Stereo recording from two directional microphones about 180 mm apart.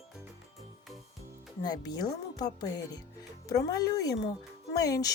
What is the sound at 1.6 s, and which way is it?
Speech, 20° left (ahead or behind).